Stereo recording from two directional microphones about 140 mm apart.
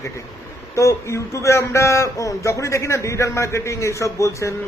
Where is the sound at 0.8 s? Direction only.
20° left (ahead or behind).